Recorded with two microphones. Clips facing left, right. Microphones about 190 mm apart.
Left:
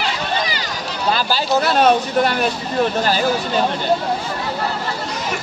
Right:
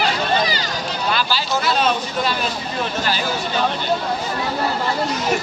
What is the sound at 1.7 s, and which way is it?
Speech, 50° left (ahead or behind).